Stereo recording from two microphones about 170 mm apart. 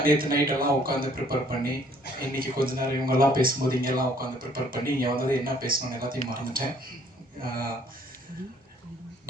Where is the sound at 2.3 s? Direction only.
60° right (ahead or behind).